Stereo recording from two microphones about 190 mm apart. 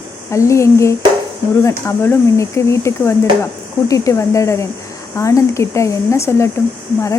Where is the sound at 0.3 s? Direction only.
15° left (ahead or behind).